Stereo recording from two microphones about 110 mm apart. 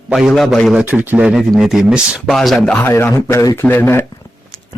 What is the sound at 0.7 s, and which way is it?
Speech, 10° right (ahead or behind).